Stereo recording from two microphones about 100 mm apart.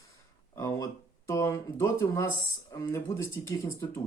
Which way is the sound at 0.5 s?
30° left (ahead or behind).